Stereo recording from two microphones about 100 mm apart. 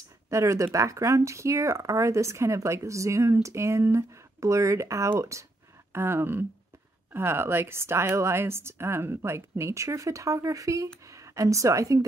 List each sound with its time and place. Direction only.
0.3 s a woman's voice: 30° right (ahead or behind)